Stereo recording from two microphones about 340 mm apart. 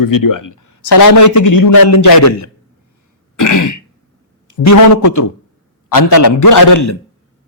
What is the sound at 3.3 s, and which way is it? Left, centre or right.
Throat clearing, left.